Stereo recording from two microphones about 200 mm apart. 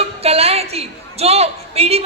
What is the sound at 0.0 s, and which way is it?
A woman's voice, 30° right (ahead or behind).